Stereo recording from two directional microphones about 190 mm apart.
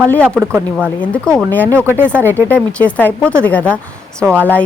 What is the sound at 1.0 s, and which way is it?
Speech, 5° left (ahead or behind).